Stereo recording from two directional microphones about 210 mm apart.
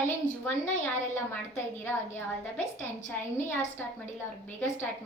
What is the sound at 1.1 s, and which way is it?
A woman's voice, 10° left (ahead or behind).